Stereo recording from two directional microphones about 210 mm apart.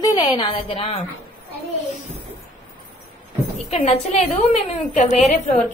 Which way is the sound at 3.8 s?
30° left (ahead or behind).